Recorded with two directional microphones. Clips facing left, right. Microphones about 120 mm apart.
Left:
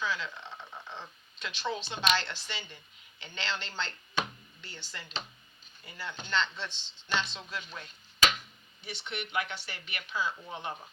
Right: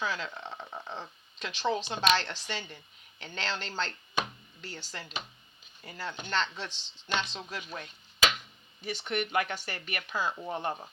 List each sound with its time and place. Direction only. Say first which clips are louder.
0.0 s speech: right 1 dB; 45° right (ahead or behind)